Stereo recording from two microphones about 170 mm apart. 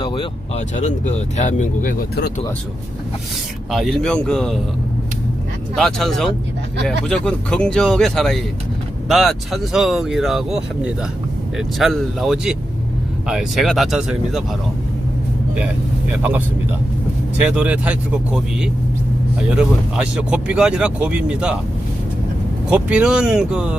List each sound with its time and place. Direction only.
0.0 s speech: 30° left (ahead or behind); by 2.0 s 50° left (ahead or behind)
3.7 s speech: centre (ahead or behind)
5.7 s speech: centre (ahead or behind)
17.4 s speech: 5° right (ahead or behind)
22.7 s speech: 5° right (ahead or behind)